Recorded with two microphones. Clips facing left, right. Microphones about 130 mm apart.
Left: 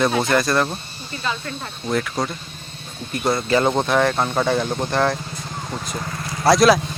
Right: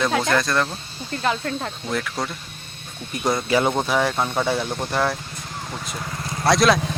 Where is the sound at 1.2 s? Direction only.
65° right (ahead or behind).